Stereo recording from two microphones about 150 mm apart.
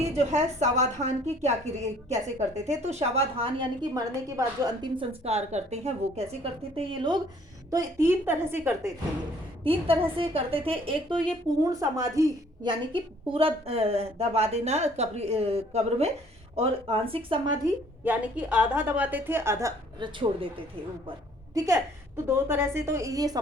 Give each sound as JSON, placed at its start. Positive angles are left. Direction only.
{"t": 0.0, "sound": "a woman's voice", "side_deg": -45}
{"t": 5.2, "sound": "a woman's voice", "side_deg": -45}
{"t": 7.7, "sound": "a woman's voice", "side_deg": -20}
{"t": 9.6, "sound": "a woman's voice", "side_deg": -40}
{"t": 11.6, "sound": "a woman's voice", "side_deg": -20}
{"t": 18.0, "sound": "a woman's voice", "side_deg": -10}
{"t": 20.0, "sound": "a woman's voice", "side_deg": -35}
{"t": 22.3, "sound": "a woman's voice", "side_deg": -15}